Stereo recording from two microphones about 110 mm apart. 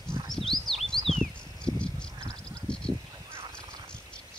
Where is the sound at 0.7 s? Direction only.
Centre (ahead or behind).